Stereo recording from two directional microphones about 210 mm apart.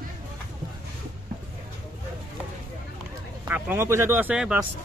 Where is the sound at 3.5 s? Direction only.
10° right (ahead or behind).